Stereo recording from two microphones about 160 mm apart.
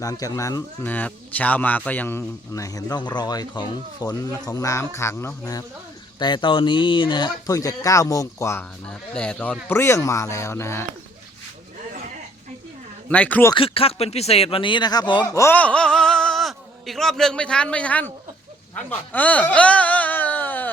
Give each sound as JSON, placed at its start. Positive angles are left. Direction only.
{"t": 0.0, "sound": "speech", "side_deg": 20}
{"t": 8.9, "sound": "speech", "side_deg": 5}
{"t": 13.1, "sound": "speech", "side_deg": 10}
{"t": 13.5, "sound": "speech", "side_deg": 35}
{"t": 18.8, "sound": "a sound", "side_deg": 10}